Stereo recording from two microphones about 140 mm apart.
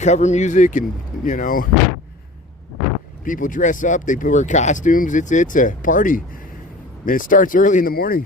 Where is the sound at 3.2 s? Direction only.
70° left (ahead or behind).